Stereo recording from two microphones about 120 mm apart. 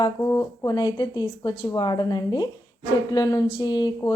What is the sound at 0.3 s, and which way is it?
Speech, 25° left (ahead or behind).